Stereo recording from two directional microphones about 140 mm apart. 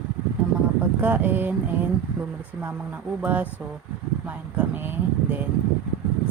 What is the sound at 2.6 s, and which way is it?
Speech, 10° right (ahead or behind).